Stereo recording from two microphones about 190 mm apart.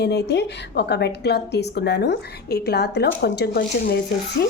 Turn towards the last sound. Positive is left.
turn(degrees=60)  # may be behind; listen again after turning